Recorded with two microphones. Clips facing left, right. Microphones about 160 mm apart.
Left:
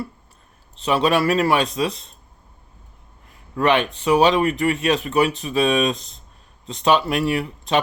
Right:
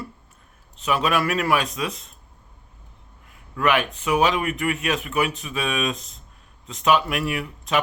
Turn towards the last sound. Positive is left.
turn(degrees=30)  # may be behind; listen again after turning